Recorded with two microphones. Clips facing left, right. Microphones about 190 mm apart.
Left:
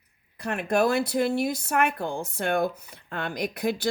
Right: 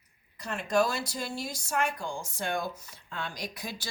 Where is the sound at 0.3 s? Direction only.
60° left (ahead or behind).